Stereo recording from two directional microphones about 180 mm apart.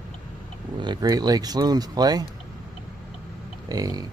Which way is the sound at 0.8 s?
25° right (ahead or behind).